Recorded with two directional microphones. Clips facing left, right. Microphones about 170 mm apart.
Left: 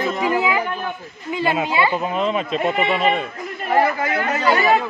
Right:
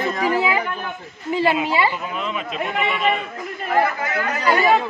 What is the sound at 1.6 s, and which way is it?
Speech, 35° left (ahead or behind).